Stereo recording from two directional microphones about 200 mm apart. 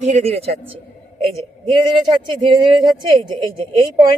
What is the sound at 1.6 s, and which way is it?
Speech, 25° right (ahead or behind).